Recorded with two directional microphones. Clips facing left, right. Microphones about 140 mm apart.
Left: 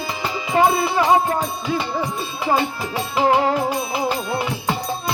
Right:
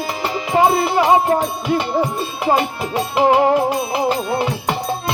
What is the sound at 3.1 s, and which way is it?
Music, 20° right (ahead or behind).